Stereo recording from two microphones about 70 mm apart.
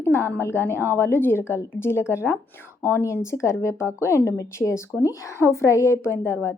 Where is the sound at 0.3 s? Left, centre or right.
Left.